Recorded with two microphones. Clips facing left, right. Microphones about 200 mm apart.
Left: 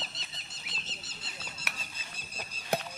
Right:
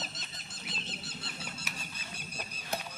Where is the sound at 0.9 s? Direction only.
60° right (ahead or behind).